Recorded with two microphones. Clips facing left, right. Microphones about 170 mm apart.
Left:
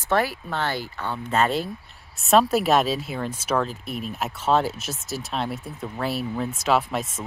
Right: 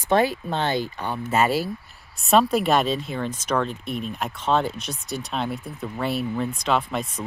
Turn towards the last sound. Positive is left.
turn(degrees=5)  # may be behind; listen again after turning